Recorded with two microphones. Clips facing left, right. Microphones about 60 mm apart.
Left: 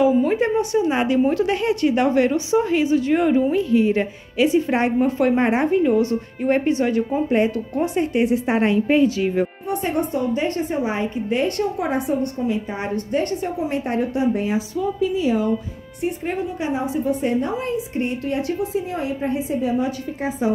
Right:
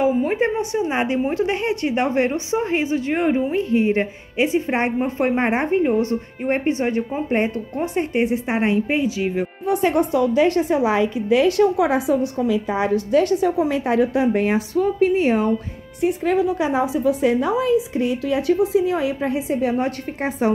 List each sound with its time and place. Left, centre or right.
0.0 s speech: right; by 9.5 s centre
9.7 s a woman's voice: right
16.0 s a woman's voice: right